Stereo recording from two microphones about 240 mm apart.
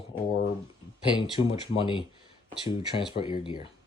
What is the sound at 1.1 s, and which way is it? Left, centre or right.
Speech, left.